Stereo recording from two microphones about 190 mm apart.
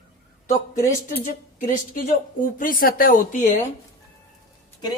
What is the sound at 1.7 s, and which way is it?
Speech, 45° left (ahead or behind).